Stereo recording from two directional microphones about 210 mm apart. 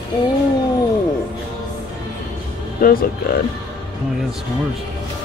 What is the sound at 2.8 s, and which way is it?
Speech, 45° left (ahead or behind).